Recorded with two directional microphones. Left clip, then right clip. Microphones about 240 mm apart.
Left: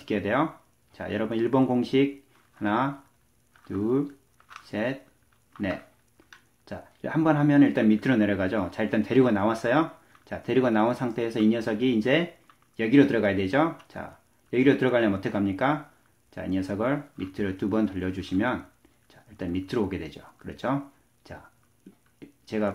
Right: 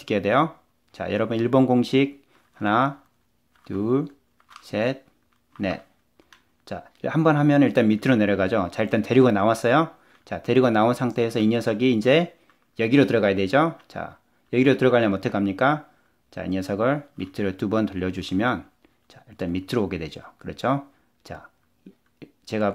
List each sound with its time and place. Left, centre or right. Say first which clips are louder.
0.0 s speech: right 5 dB; right
4.6 s speech: right 5 dB; right
22.2 s a sound: right 4 dB; right